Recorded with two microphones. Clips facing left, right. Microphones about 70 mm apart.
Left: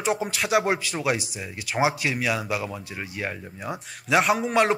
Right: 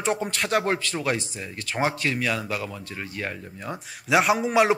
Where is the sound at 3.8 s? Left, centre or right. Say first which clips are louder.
Right 1 dB; centre.